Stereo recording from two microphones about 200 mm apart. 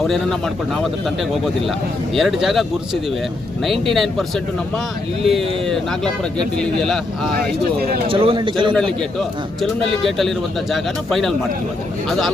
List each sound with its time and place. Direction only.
0.0 s speech: centre (ahead or behind)
2.1 s speech: centre (ahead or behind)
8.0 s a man's voice: 25° right (ahead or behind)
8.7 s speech: 5° left (ahead or behind)